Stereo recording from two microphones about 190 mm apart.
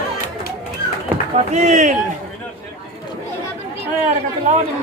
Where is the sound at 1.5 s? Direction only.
35° right (ahead or behind).